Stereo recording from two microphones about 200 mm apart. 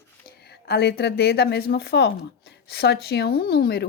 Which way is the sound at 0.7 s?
50° left (ahead or behind).